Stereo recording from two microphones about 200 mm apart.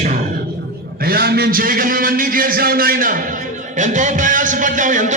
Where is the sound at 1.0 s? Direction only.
50° right (ahead or behind).